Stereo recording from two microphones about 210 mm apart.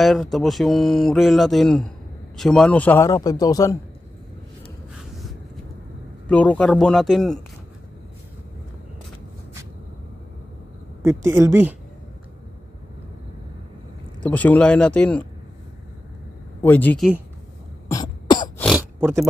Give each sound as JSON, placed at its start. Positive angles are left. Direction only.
{"t": 0.0, "sound": "a man's voice", "side_deg": 0}
{"t": 6.2, "sound": "speech", "side_deg": 5}
{"t": 11.0, "sound": "a woman's voice", "side_deg": -10}
{"t": 14.2, "sound": "speech", "side_deg": 5}
{"t": 16.6, "sound": "a man's voice", "side_deg": 10}
{"t": 17.8, "sound": "cough", "side_deg": 20}
{"t": 18.6, "sound": "a sound", "side_deg": -5}